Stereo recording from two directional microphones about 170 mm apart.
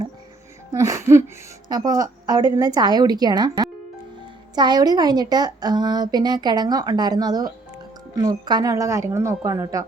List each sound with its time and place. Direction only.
0.7 s music: 20° right (ahead or behind)
1.6 s a woman's voice: 20° right (ahead or behind)